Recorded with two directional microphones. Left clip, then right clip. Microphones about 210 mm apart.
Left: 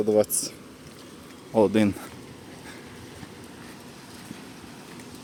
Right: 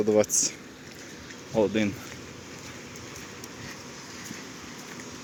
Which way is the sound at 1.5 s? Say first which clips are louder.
Left 4 dB; 20° left (ahead or behind).